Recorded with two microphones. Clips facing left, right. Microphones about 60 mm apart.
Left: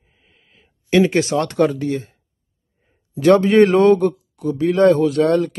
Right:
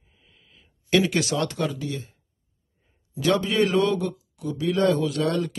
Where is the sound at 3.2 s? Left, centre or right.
Left.